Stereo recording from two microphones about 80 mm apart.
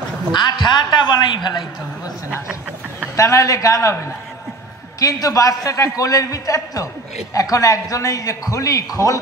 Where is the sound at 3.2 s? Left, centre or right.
Left.